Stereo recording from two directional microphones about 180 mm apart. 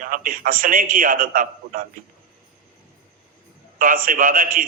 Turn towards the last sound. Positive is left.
turn(degrees=-50)  # may be behind; listen again after turning